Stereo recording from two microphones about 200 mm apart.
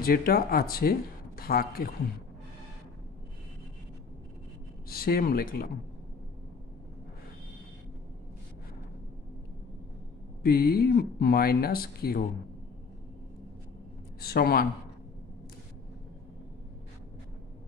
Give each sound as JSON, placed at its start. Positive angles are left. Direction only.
{"t": 0.0, "sound": "speech", "side_deg": 50}
{"t": 4.8, "sound": "speech", "side_deg": 50}
{"t": 10.4, "sound": "speech", "side_deg": 50}
{"t": 14.2, "sound": "speech", "side_deg": 50}